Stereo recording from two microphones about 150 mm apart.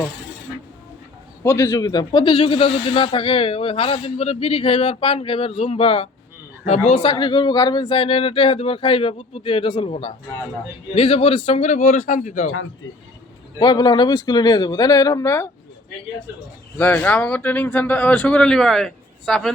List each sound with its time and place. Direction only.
1.5 s a man's voice: 15° left (ahead or behind); by 6.9 s 45° left (ahead or behind)
7.0 s a man's voice: 30° left (ahead or behind); by 12.5 s 55° left (ahead or behind)
13.6 s speech: 30° left (ahead or behind)
16.7 s a man's voice: 10° left (ahead or behind)